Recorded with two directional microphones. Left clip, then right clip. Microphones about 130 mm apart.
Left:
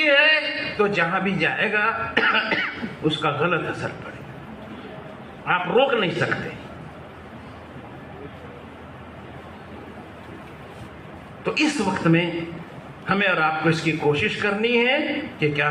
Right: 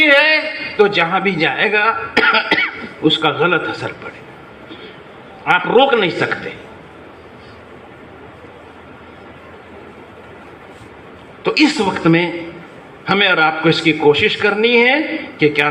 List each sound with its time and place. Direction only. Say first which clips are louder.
0.0 s a man's voice: right 6 dB; 30° right (ahead or behind)
5.5 s a man's voice: right 8 dB; 30° right (ahead or behind)
11.4 s a woman's voice: right 8 dB; 30° right (ahead or behind)